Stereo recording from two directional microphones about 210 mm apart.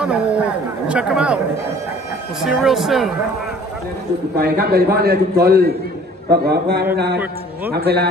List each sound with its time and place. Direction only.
0.0 s speech: 5° right (ahead or behind)
2.4 s speech: centre (ahead or behind)
4.4 s a man's voice: 50° right (ahead or behind)